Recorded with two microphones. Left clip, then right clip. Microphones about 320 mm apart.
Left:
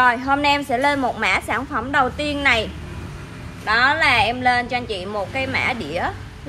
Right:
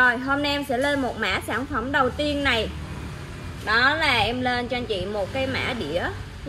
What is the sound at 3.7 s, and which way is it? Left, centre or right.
A woman's voice, left.